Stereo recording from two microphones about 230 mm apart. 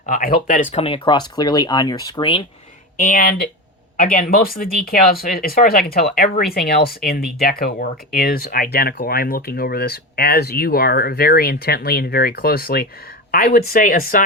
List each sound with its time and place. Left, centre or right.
0.0 s speech: left; by 2.4 s centre
3.0 s speech: left